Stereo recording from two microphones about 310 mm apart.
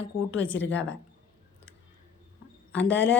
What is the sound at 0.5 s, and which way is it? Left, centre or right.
Speech, left.